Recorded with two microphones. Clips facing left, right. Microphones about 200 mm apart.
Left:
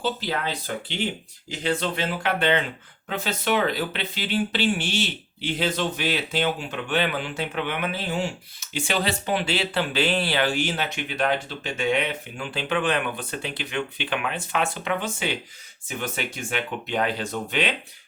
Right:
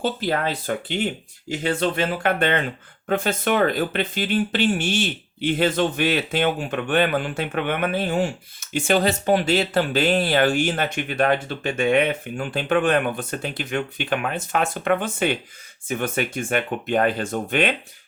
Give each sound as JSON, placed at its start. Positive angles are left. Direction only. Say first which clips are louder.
{"t": 0.0, "sound": "speech", "louder": "right 4 dB", "side_deg": -50}